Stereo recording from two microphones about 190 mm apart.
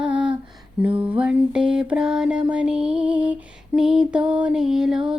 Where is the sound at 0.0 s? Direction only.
5° right (ahead or behind).